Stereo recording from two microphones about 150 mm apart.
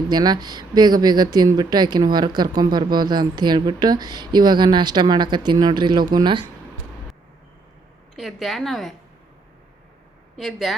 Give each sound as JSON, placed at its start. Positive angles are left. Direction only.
{"t": 0.1, "sound": "speech", "side_deg": -30}
{"t": 8.1, "sound": "a woman's voice", "side_deg": 0}
{"t": 10.3, "sound": "a woman's voice", "side_deg": 0}